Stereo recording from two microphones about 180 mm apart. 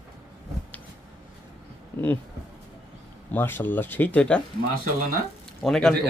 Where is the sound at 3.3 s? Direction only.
10° left (ahead or behind).